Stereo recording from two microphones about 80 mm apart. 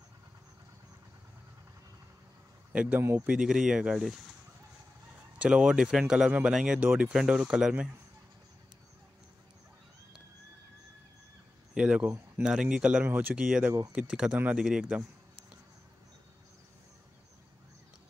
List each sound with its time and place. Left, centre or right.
2.7 s speech: centre
5.4 s speech: centre
11.7 s speech: centre
13.0 s speech: right
13.3 s speech: centre